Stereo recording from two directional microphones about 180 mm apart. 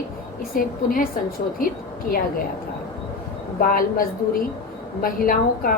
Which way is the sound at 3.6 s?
50° left (ahead or behind).